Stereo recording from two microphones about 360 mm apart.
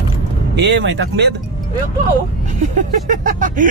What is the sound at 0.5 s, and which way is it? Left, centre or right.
Speech, right.